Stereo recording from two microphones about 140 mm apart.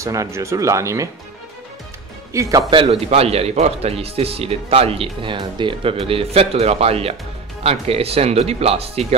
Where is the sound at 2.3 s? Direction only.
20° right (ahead or behind).